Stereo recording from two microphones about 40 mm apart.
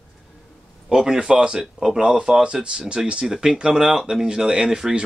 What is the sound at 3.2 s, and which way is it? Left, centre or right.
Speech, centre.